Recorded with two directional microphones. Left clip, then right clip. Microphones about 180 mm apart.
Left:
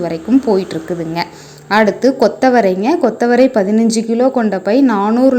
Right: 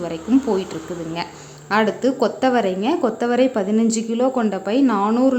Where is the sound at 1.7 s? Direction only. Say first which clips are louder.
Left 7 dB; 20° left (ahead or behind).